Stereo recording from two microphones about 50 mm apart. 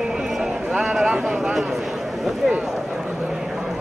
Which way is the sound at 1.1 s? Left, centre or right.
Centre.